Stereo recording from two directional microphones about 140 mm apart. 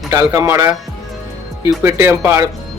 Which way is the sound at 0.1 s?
25° right (ahead or behind).